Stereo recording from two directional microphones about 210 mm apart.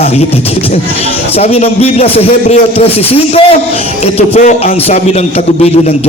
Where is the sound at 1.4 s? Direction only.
30° left (ahead or behind).